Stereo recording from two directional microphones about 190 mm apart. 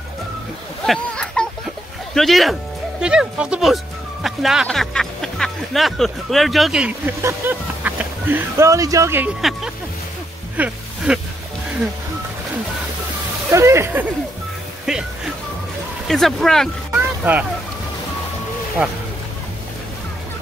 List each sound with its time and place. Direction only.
0.8 s speech: 5° left (ahead or behind); by 9.3 s 15° right (ahead or behind)
9.4 s speech: centre (ahead or behind)
13.5 s speech: 15° right (ahead or behind)
14.9 s speech: centre (ahead or behind)
16.1 s speech: centre (ahead or behind)